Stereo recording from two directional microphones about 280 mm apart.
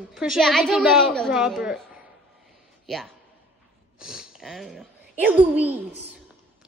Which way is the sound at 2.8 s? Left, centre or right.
Centre.